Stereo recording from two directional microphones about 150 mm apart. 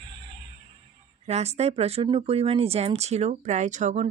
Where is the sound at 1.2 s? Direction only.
45° right (ahead or behind).